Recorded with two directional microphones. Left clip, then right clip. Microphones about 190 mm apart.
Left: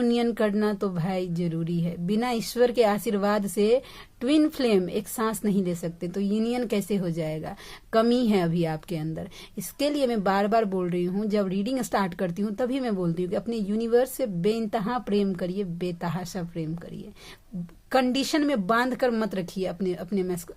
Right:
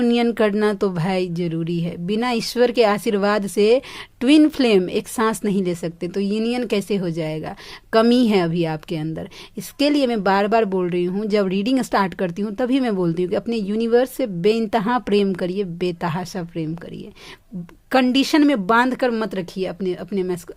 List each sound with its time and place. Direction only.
0.0 s speech: 25° right (ahead or behind)
17.9 s speech: 25° right (ahead or behind)